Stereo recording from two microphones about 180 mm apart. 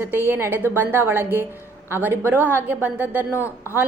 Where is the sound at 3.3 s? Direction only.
15° left (ahead or behind).